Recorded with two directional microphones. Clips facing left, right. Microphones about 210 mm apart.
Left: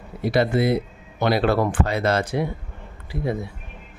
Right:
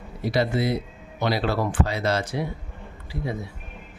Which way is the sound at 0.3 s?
55° left (ahead or behind).